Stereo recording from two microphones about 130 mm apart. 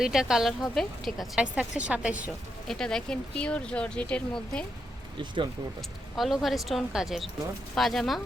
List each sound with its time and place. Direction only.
0.0 s a woman's voice: 5° right (ahead or behind)
2.6 s speech: 5° left (ahead or behind)
5.2 s speech: 35° right (ahead or behind)
6.1 s a woman's voice: centre (ahead or behind)